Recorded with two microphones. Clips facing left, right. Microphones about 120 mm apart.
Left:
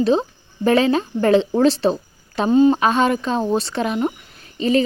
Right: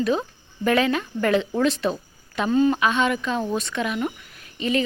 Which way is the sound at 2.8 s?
35° left (ahead or behind).